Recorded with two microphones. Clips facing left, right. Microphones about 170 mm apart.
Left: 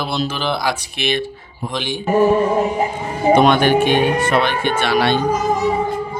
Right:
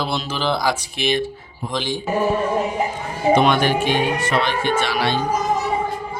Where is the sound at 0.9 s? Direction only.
65° left (ahead or behind).